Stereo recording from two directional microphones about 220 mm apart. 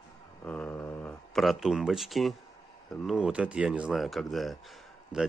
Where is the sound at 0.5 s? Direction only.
5° left (ahead or behind).